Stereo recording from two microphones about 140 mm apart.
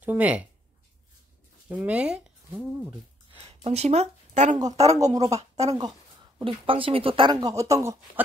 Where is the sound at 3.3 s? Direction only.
45° right (ahead or behind).